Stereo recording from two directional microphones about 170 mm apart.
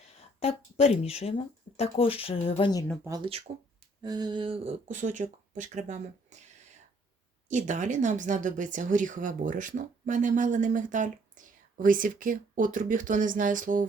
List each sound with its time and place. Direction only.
0.2 s speech: 35° left (ahead or behind)
3.2 s speech: 35° right (ahead or behind)
4.0 s speech: 25° right (ahead or behind); by 6.4 s 45° right (ahead or behind)
7.4 s speech: 45° right (ahead or behind)